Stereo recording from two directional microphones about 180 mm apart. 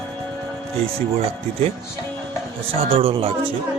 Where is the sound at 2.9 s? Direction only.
30° right (ahead or behind).